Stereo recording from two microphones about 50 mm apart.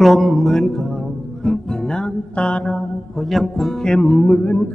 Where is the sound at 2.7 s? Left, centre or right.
Centre.